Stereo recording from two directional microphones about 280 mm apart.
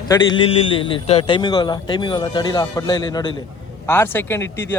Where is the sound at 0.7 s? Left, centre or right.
Centre.